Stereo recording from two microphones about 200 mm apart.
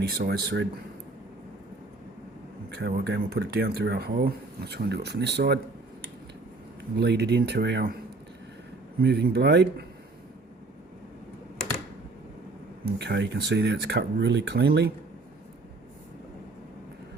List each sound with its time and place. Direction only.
0.1 s speech: 55° right (ahead or behind)
2.6 s speech: 55° right (ahead or behind)
6.9 s speech: 55° right (ahead or behind)
9.0 s speech: 50° right (ahead or behind)
13.0 s speech: 60° right (ahead or behind)